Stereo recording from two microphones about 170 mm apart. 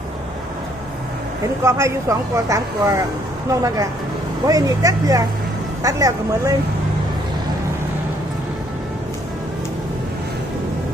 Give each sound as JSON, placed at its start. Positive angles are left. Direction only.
{"t": 1.6, "sound": "speech", "side_deg": -15}